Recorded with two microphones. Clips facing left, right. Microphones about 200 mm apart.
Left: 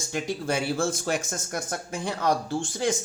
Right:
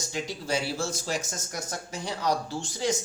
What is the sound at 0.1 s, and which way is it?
Speech, 55° left (ahead or behind).